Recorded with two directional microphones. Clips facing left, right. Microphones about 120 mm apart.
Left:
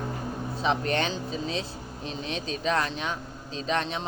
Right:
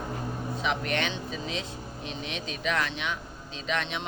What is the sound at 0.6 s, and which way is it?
Speech, 35° left (ahead or behind).